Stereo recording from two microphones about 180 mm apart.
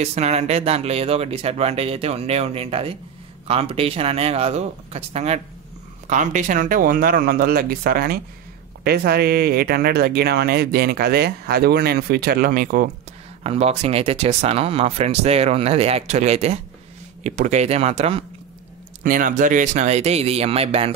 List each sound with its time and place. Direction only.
0.0 s speech: 35° right (ahead or behind)
13.4 s speech: 35° right (ahead or behind)
19.0 s speech: 50° right (ahead or behind); by 20.9 s 35° right (ahead or behind)